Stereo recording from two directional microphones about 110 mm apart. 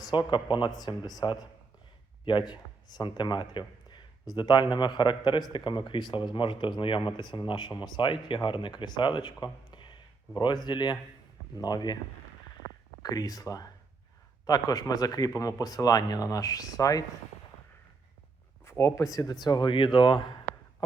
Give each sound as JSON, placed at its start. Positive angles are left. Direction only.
{"t": 0.0, "sound": "speech", "side_deg": 45}
{"t": 2.5, "sound": "speech", "side_deg": 40}
{"t": 13.0, "sound": "speech", "side_deg": 35}
{"t": 18.6, "sound": "speech", "side_deg": 25}